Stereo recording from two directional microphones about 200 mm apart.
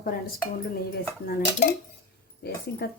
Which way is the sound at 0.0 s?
45° left (ahead or behind).